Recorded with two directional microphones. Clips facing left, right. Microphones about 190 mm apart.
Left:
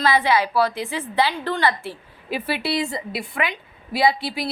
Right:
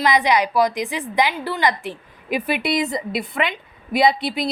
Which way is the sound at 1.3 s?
5° right (ahead or behind).